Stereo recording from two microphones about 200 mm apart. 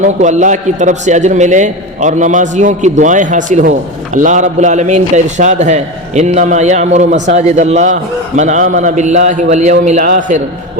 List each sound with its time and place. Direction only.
0.0 s a man's voice: 40° right (ahead or behind)